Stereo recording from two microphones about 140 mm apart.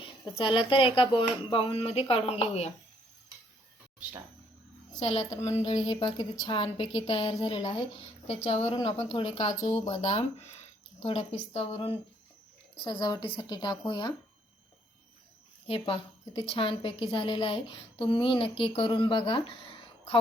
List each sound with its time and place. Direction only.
0.3 s speech: 35° left (ahead or behind)
4.9 s speech: 50° left (ahead or behind)
5.7 s a woman's voice: 35° left (ahead or behind)
15.6 s a woman's voice: 40° left (ahead or behind)